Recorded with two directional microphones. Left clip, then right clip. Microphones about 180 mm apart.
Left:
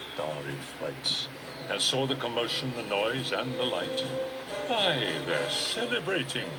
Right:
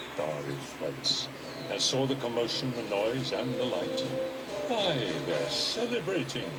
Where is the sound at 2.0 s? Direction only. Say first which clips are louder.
Even; 10° left (ahead or behind).